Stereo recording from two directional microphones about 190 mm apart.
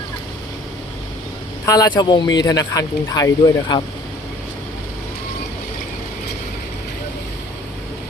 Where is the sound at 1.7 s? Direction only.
20° left (ahead or behind).